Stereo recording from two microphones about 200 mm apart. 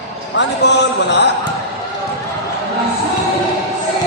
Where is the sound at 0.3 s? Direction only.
60° left (ahead or behind).